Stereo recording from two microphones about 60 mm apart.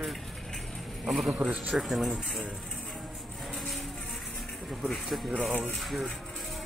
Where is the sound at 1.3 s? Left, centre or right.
Right.